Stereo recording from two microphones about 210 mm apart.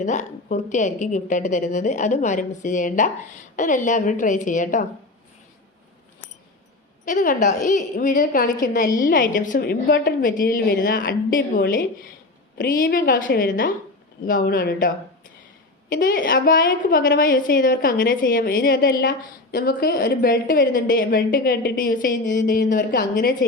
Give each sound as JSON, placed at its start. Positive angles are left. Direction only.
{"t": 0.0, "sound": "a woman's voice", "side_deg": 35}
{"t": 7.0, "sound": "a woman's voice", "side_deg": 40}